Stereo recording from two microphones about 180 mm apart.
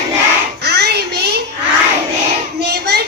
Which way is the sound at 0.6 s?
65° right (ahead or behind).